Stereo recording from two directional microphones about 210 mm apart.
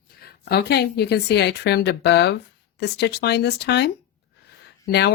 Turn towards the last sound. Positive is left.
turn(degrees=50)  # may be behind; listen again after turning